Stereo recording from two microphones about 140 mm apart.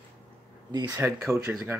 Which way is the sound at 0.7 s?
30° right (ahead or behind).